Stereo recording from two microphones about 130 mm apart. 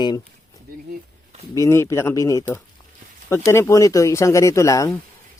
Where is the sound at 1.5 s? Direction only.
25° left (ahead or behind).